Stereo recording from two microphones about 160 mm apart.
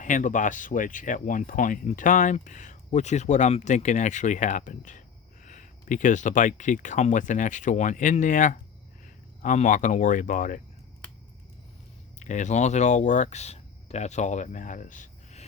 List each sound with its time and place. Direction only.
0.0 s speech: 50° left (ahead or behind)
12.2 s speech: 50° left (ahead or behind)